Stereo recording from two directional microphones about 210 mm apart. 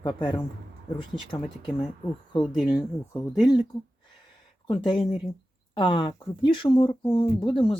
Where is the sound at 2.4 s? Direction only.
Centre (ahead or behind).